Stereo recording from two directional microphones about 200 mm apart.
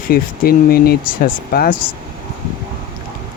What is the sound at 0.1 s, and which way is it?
Speech, 50° left (ahead or behind).